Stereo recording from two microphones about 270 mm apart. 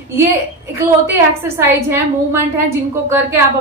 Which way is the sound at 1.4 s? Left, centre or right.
Centre.